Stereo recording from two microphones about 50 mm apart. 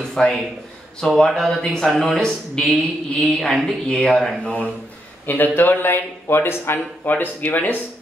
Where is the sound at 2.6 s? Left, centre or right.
Centre.